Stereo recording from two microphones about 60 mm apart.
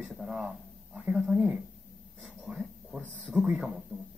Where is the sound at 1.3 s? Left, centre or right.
Right.